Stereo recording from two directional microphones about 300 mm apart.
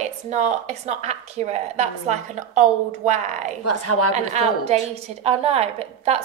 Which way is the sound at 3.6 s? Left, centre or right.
Left.